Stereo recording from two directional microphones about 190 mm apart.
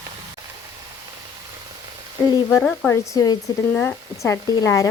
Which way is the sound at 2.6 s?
5° left (ahead or behind).